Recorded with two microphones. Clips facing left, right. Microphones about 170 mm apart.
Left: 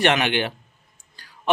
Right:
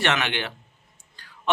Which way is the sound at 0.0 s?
15° left (ahead or behind).